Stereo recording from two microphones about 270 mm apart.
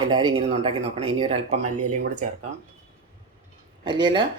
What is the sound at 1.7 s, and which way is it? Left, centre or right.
Speech, right.